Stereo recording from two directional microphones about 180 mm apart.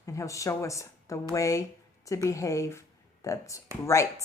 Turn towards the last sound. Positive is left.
turn(degrees=15)  # may be behind; listen again after turning